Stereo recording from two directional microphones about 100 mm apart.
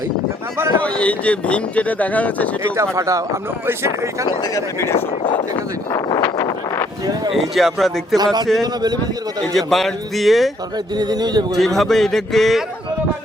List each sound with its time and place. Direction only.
0.8 s speech: 10° left (ahead or behind)
2.7 s speech: 30° right (ahead or behind)
4.4 s speech: 30° left (ahead or behind)
5.9 s a sound: 40° left (ahead or behind)
6.2 s a sound: 25° left (ahead or behind)
7.3 s a man's voice: centre (ahead or behind)
8.1 s speech: 45° right (ahead or behind)
9.5 s a man's voice: centre (ahead or behind)
10.9 s speech: 45° right (ahead or behind)
11.5 s a man's voice: centre (ahead or behind)